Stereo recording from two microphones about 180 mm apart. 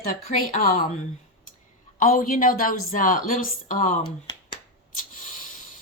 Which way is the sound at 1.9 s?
50° left (ahead or behind).